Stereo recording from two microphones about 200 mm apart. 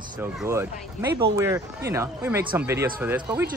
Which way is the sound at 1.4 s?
15° right (ahead or behind).